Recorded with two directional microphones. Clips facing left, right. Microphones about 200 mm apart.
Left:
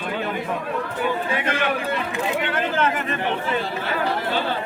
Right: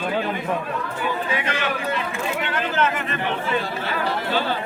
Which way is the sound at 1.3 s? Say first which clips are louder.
Left 2 dB; 50° left (ahead or behind).